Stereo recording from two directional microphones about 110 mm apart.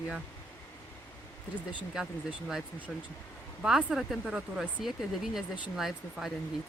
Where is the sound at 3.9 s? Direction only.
Centre (ahead or behind).